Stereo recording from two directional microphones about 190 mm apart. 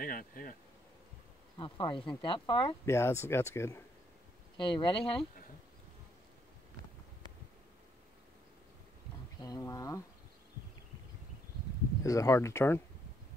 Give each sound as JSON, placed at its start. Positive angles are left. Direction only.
{"t": 0.0, "sound": "speech", "side_deg": 45}
{"t": 1.6, "sound": "speech", "side_deg": 25}
{"t": 2.8, "sound": "speech", "side_deg": 15}
{"t": 4.6, "sound": "speech", "side_deg": 25}
{"t": 9.4, "sound": "speech", "side_deg": 20}
{"t": 12.0, "sound": "speech", "side_deg": 15}